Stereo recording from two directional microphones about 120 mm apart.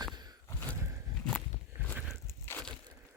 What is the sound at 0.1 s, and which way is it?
Sigh, 35° right (ahead or behind).